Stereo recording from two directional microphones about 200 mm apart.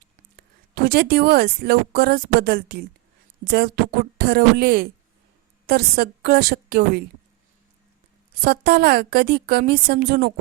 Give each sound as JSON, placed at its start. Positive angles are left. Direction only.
{"t": 0.7, "sound": "a woman's voice", "side_deg": -55}
{"t": 8.4, "sound": "a woman's voice", "side_deg": -50}